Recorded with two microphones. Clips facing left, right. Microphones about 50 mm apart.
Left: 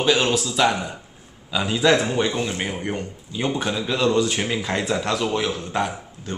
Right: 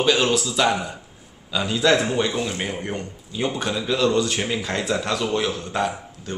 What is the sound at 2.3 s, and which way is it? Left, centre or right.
Speech, centre.